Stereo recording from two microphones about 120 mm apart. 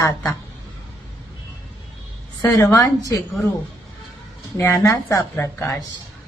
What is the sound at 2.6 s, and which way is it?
Speech, 25° left (ahead or behind).